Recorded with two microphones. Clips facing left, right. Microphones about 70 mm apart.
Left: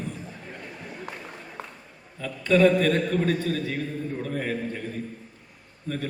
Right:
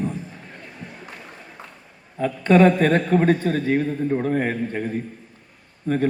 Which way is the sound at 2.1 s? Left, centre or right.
Right.